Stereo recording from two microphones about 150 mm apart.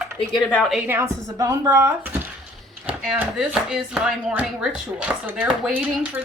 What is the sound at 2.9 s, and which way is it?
Speech, 10° right (ahead or behind).